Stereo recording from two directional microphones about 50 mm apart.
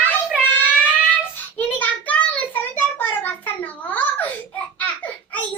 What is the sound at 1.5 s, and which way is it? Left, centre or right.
Child singing, left.